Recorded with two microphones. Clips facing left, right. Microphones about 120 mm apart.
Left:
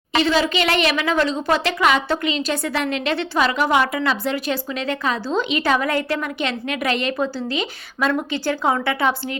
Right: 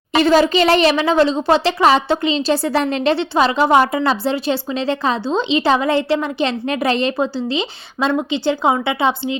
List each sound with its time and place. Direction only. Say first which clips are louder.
0.2 s a woman's voice: right 6 dB; 45° right (ahead or behind); by 9.4 s 20° right (ahead or behind)